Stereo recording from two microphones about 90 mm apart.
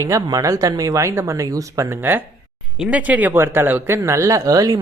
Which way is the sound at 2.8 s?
15° right (ahead or behind).